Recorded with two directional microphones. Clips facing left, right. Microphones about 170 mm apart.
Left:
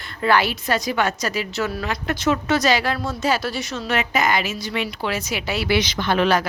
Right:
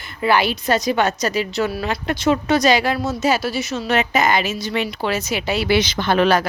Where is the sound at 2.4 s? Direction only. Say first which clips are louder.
Right 4 dB; 15° right (ahead or behind).